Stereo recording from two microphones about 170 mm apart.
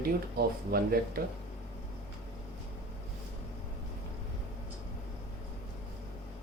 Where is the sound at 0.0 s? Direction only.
60° right (ahead or behind).